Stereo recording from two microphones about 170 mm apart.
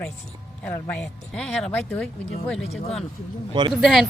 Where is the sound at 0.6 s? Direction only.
5° left (ahead or behind).